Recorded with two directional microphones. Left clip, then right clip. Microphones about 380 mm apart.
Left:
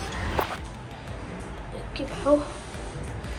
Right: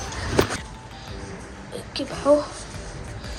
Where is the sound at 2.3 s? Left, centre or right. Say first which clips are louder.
Right 4 dB; centre.